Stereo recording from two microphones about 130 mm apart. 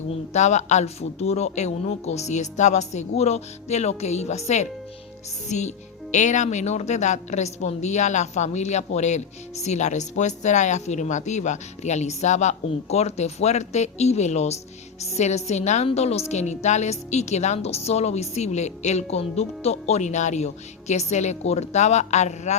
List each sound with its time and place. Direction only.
0.3 s a woman's voice: 65° left (ahead or behind)